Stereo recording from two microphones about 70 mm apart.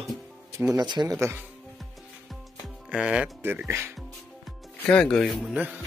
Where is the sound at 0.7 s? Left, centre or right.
Right.